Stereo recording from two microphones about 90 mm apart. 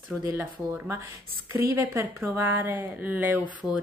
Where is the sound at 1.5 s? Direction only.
35° right (ahead or behind).